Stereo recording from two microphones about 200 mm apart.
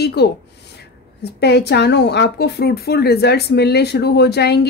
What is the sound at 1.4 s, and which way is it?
Speech, 55° left (ahead or behind).